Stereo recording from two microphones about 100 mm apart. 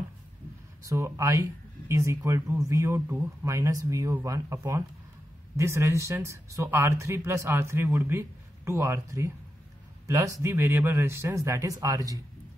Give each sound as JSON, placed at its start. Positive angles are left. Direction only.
{"t": 0.8, "sound": "speech", "side_deg": -30}